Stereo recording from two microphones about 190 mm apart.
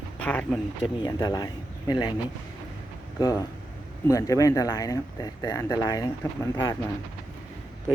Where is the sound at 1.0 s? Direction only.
20° left (ahead or behind).